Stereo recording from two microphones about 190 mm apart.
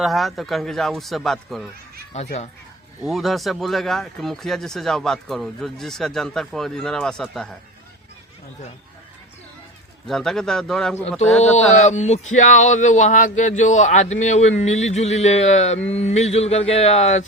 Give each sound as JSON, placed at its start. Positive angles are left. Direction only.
{"t": 0.0, "sound": "speech", "side_deg": 0}
{"t": 2.1, "sound": "speech", "side_deg": 35}
{"t": 3.0, "sound": "speech", "side_deg": 0}
{"t": 10.1, "sound": "speech", "side_deg": 0}
{"t": 11.5, "sound": "speech", "side_deg": 40}